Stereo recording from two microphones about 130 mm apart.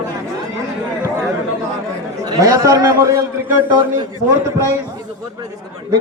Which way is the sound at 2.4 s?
30° right (ahead or behind).